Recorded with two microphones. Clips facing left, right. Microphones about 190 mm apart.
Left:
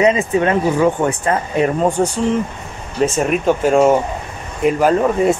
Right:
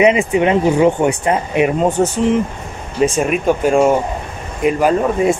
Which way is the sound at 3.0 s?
5° right (ahead or behind).